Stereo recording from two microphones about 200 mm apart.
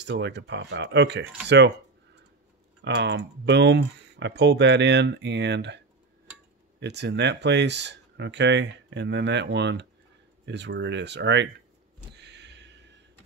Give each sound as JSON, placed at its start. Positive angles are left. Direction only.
{"t": 0.0, "sound": "speech", "side_deg": -60}
{"t": 2.8, "sound": "speech", "side_deg": -60}
{"t": 6.8, "sound": "speech", "side_deg": -60}
{"t": 12.1, "sound": "a sound", "side_deg": -60}